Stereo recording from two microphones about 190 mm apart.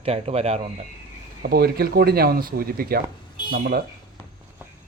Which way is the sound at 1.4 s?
55° right (ahead or behind).